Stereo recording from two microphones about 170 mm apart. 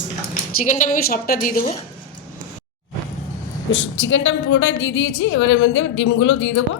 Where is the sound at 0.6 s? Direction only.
50° left (ahead or behind).